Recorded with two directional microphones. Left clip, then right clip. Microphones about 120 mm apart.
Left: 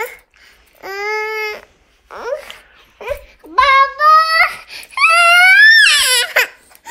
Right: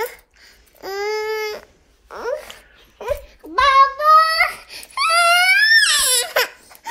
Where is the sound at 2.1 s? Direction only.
5° right (ahead or behind).